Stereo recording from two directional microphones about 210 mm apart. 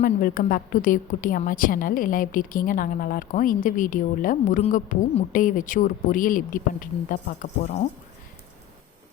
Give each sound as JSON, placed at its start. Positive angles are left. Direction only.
{"t": 0.0, "sound": "a woman's voice", "side_deg": 40}